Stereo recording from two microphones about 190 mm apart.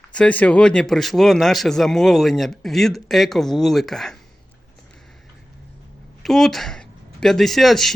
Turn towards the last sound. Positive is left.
turn(degrees=0)  # may be behind; listen again after turning